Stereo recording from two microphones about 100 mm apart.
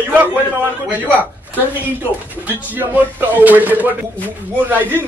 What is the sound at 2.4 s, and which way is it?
A man's voice, 20° right (ahead or behind).